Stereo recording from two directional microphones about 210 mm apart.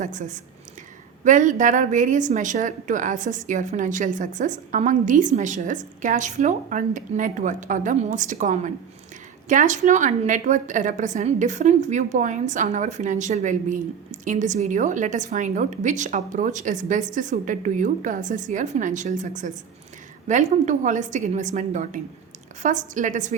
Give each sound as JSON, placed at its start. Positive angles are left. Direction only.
{"t": 0.0, "sound": "a woman's voice", "side_deg": -35}